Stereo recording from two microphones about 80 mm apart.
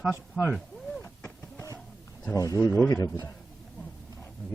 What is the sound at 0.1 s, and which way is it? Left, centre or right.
Speech, left.